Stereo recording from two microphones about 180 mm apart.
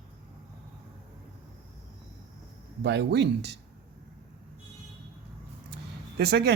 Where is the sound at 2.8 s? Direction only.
70° right (ahead or behind).